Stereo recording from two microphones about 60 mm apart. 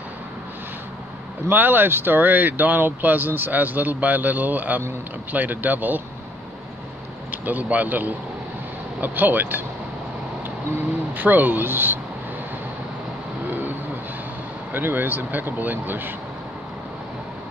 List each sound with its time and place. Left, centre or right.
1.5 s speech: right
7.2 s speech: right
11.1 s speech: right
13.5 s vehicle: right
14.7 s speech: right